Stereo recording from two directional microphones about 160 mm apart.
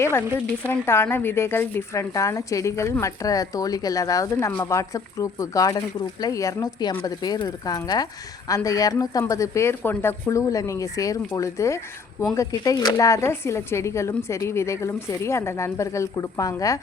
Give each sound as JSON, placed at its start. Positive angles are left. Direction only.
{"t": 0.0, "sound": "speech", "side_deg": 15}